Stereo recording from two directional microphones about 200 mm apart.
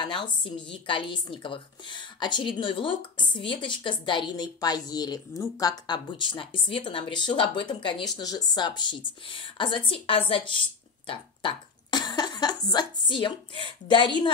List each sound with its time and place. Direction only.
0.0 s speech: 25° left (ahead or behind)